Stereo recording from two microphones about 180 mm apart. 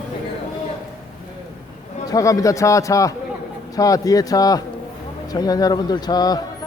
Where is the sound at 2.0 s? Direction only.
20° left (ahead or behind).